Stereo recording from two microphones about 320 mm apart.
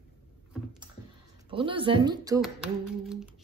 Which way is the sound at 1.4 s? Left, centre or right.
Centre.